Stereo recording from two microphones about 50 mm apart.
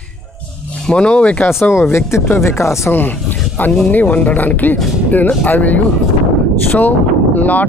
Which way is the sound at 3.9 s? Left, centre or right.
Left.